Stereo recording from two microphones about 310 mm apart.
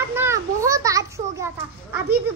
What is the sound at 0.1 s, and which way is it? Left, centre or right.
Children playing, centre.